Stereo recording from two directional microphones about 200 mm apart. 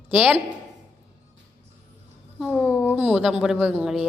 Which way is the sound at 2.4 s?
Centre (ahead or behind).